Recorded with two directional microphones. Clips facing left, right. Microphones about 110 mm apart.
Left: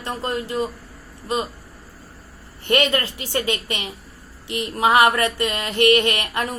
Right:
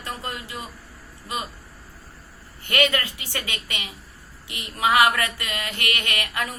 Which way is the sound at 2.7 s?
30° left (ahead or behind).